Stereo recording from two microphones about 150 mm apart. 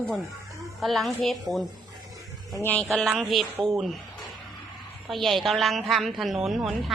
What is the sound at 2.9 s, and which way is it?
A woman's voice, centre (ahead or behind).